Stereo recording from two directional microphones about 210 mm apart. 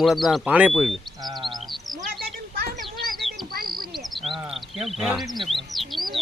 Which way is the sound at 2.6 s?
45° right (ahead or behind).